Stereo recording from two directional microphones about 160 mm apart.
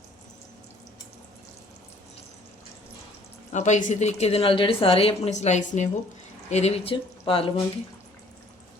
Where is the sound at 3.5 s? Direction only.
45° left (ahead or behind).